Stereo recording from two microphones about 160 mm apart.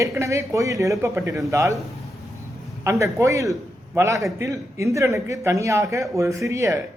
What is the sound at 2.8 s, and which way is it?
A man's voice, 20° right (ahead or behind).